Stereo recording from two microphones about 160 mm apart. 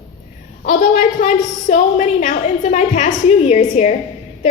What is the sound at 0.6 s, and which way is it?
A woman's voice, 45° left (ahead or behind).